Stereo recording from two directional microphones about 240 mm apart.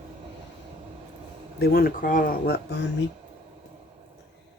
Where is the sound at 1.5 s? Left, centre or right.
Left.